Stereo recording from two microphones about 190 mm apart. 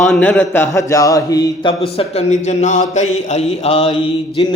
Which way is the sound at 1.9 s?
35° left (ahead or behind).